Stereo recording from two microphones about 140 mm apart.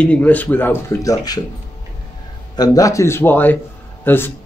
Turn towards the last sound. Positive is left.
turn(degrees=15)  # may be behind; listen again after turning